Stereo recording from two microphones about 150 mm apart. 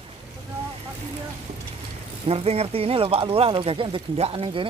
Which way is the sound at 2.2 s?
40° right (ahead or behind).